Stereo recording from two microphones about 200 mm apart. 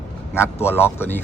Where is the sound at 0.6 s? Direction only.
10° left (ahead or behind).